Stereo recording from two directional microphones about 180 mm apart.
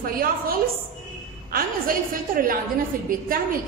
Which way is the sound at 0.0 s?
55° right (ahead or behind).